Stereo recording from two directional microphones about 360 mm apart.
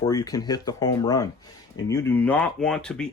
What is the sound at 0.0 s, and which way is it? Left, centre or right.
A man's voice, centre.